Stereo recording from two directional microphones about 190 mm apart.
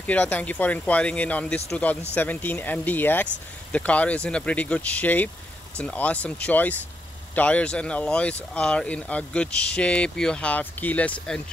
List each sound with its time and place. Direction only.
0.0 s speech: 5° left (ahead or behind)